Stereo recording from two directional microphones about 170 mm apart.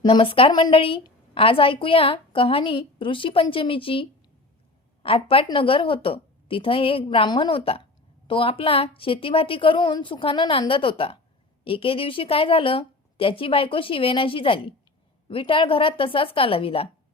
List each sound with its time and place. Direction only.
0.0 s a woman's voice: 30° left (ahead or behind)